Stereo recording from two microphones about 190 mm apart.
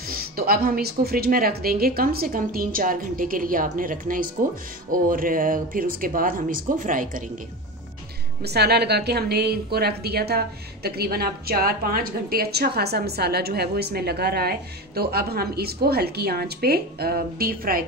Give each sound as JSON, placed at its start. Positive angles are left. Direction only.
{"t": 0.1, "sound": "speech", "side_deg": -50}
{"t": 8.4, "sound": "a woman's voice", "side_deg": -60}